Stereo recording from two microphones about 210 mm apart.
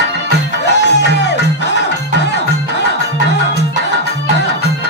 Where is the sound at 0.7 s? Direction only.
55° left (ahead or behind).